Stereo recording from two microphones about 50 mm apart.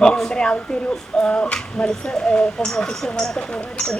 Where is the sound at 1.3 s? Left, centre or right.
Left.